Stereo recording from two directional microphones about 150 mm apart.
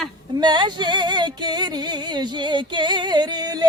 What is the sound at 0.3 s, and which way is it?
Singing, 30° right (ahead or behind).